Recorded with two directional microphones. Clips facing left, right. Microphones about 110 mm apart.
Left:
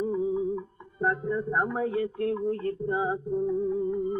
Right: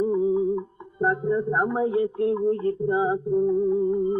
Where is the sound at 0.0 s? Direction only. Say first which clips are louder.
Right 6 dB; 20° right (ahead or behind).